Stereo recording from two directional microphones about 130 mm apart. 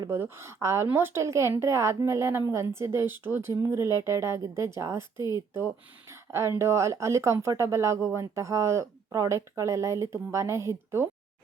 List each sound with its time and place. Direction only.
0.1 s speech: 20° right (ahead or behind)